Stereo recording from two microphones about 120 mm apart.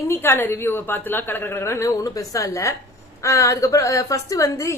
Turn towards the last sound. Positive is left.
turn(degrees=25)  # may be behind; listen again after turning